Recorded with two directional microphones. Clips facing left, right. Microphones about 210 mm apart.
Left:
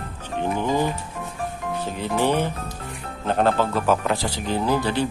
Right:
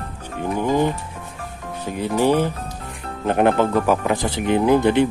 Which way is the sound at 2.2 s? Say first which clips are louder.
Right 4 dB; 10° right (ahead or behind).